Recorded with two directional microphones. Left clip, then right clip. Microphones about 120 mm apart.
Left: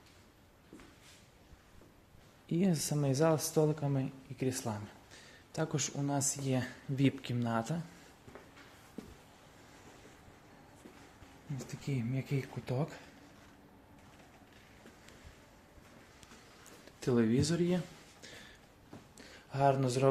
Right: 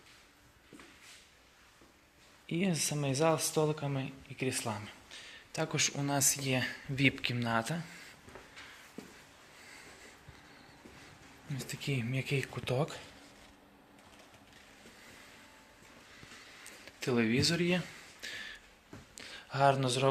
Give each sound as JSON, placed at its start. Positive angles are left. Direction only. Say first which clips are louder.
{"t": 2.5, "sound": "a man's voice", "louder": "even", "side_deg": 50}
{"t": 5.1, "sound": "a sound", "louder": "right 2 dB", "side_deg": 50}
{"t": 6.1, "sound": "speech", "louder": "right 4 dB", "side_deg": 20}
{"t": 6.4, "sound": "speech", "louder": "right 3 dB", "side_deg": 35}
{"t": 11.5, "sound": "speech", "louder": "right 4 dB", "side_deg": 10}
{"t": 17.0, "sound": "a sound", "louder": "right 1 dB", "side_deg": 40}